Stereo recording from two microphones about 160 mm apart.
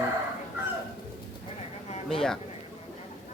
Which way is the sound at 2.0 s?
5° left (ahead or behind).